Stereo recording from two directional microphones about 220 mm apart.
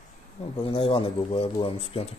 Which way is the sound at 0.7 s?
25° left (ahead or behind).